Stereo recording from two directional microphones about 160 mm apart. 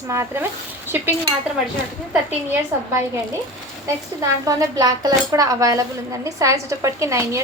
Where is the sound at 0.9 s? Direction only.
15° right (ahead or behind).